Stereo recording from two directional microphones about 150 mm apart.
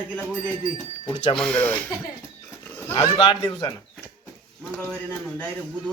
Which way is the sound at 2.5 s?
15° left (ahead or behind).